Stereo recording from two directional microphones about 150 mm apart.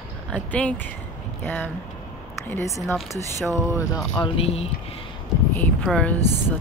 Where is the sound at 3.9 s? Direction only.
25° left (ahead or behind).